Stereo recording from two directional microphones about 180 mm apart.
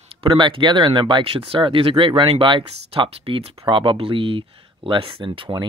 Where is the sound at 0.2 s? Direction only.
30° right (ahead or behind).